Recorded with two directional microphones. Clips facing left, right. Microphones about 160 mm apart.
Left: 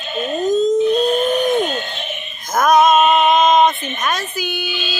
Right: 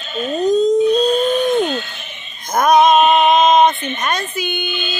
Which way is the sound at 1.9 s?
65° left (ahead or behind).